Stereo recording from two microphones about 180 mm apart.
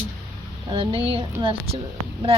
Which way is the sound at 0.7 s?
30° right (ahead or behind).